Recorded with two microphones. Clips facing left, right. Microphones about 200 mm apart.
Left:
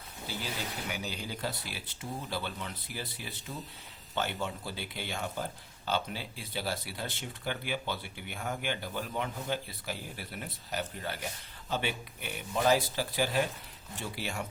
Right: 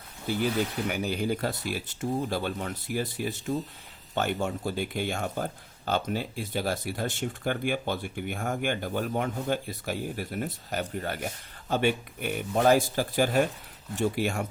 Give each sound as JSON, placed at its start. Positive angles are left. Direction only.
{"t": 0.3, "sound": "speech", "side_deg": -55}